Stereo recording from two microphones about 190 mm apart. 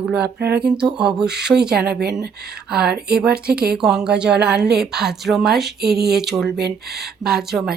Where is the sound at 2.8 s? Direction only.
55° right (ahead or behind).